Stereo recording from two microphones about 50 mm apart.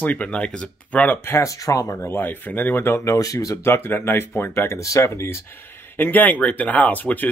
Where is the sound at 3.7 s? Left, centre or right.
Left.